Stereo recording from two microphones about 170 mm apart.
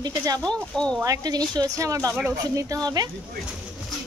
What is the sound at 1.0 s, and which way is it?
A woman's voice, 20° right (ahead or behind).